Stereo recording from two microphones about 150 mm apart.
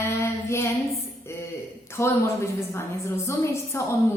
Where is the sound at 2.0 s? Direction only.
15° left (ahead or behind).